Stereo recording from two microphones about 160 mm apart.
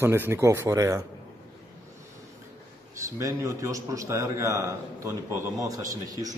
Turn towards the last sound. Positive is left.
turn(degrees=-20)  # may be behind; listen again after turning